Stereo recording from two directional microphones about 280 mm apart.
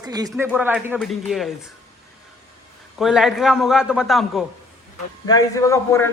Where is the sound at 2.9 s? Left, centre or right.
Centre.